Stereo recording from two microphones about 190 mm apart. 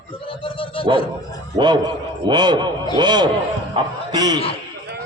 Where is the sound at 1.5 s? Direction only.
25° right (ahead or behind).